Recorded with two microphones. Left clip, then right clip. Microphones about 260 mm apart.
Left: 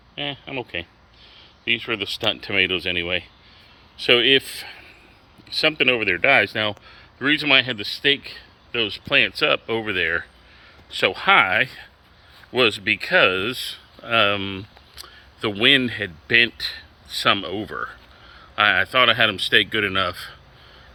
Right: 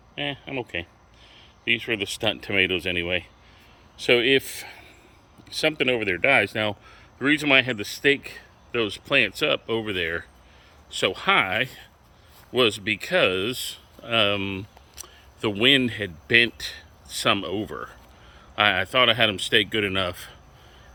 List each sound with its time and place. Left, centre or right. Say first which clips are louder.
0.2 s speech: left 1 dB; centre